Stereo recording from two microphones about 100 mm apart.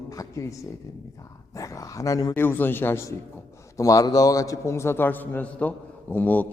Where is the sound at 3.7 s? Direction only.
35° left (ahead or behind).